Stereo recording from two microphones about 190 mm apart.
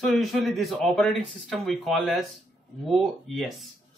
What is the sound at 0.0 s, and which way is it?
Speech, centre (ahead or behind).